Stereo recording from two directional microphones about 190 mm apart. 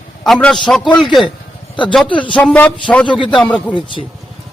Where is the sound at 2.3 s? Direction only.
5° left (ahead or behind).